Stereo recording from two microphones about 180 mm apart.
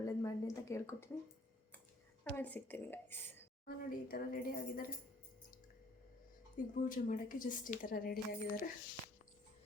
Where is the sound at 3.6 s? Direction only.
50° left (ahead or behind).